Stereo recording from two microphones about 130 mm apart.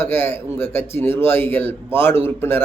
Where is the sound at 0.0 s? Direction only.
15° left (ahead or behind).